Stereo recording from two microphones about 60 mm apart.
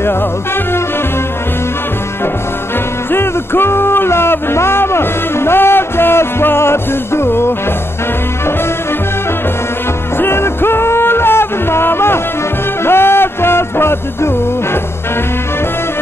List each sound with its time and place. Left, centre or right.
3.1 s music: left
10.1 s music: left